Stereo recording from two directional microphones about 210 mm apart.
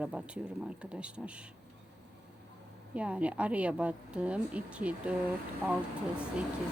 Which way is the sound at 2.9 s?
5° right (ahead or behind).